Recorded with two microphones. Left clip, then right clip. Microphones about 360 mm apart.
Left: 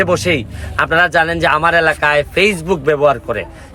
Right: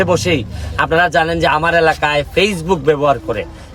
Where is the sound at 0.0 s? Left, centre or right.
Centre.